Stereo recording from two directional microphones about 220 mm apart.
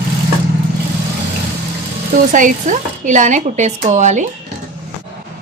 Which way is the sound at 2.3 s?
35° right (ahead or behind).